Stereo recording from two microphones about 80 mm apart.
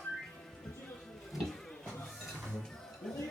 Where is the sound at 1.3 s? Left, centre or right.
Centre.